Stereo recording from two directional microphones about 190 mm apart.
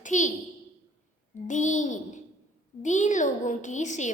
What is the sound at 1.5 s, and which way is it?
A woman's voice, 40° left (ahead or behind).